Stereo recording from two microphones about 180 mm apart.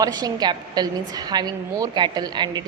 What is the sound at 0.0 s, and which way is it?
A woman's voice, 20° right (ahead or behind).